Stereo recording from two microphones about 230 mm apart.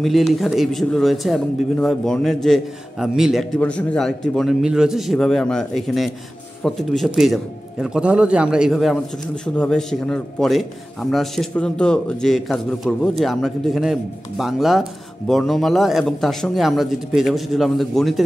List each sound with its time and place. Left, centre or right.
0.0 s a man's voice: centre